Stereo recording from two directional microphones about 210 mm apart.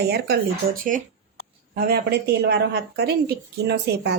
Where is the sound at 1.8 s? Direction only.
50° right (ahead or behind).